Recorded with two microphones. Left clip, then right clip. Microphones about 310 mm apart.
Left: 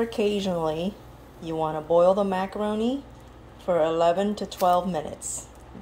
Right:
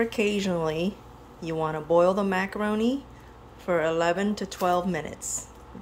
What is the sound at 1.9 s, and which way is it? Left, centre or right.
Speech, centre.